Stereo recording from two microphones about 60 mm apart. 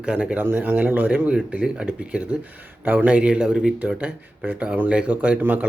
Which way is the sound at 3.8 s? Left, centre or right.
Right.